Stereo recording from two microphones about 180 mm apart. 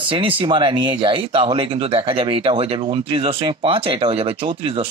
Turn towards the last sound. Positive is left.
turn(degrees=-30)  # may be behind; listen again after turning